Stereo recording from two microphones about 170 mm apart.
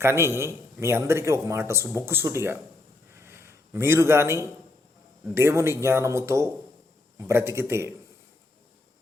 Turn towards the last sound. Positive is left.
turn(degrees=-15)  # may be behind; listen again after turning